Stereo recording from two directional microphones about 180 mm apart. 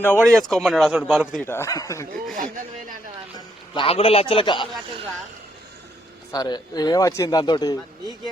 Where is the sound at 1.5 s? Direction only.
15° left (ahead or behind).